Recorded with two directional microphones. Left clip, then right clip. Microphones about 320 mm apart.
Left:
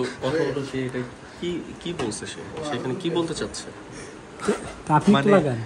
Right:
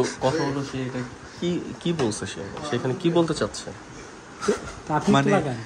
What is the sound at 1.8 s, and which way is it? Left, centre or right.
Speech, right.